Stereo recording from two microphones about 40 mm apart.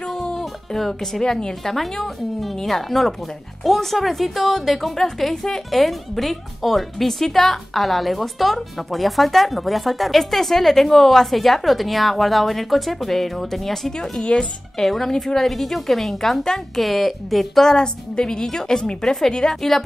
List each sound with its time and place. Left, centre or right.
0.1 s music: centre
1.6 s a woman's voice: centre
5.7 s speech: centre
14.2 s speech: left
14.8 s a woman's voice: centre
17.6 s a woman's voice: centre